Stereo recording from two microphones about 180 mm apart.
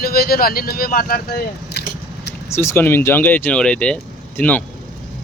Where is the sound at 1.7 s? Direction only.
65° left (ahead or behind).